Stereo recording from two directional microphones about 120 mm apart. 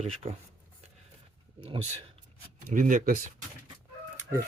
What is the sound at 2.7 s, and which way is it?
Speech, 90° right.